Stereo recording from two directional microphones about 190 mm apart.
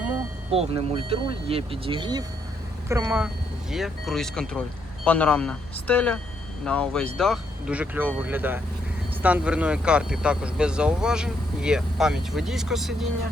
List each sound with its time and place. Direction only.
0.5 s speech: 30° right (ahead or behind)
2.9 s speech: 10° right (ahead or behind)
3.7 s speech: centre (ahead or behind)